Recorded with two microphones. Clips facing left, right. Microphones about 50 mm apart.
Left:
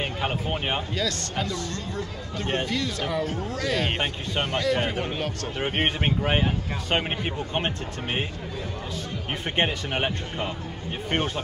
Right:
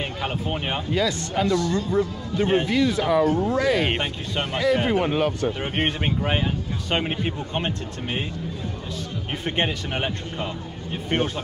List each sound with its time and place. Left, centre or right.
0.0 s speech: centre
0.9 s speech: centre
4.0 s speech: centre
4.5 s speech: centre
5.6 s speech: centre
9.4 s speech: centre